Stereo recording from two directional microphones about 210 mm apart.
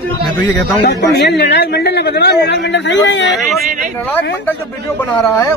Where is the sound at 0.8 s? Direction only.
55° left (ahead or behind).